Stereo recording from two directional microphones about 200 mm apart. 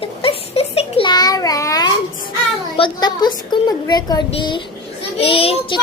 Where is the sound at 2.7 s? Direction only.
25° left (ahead or behind).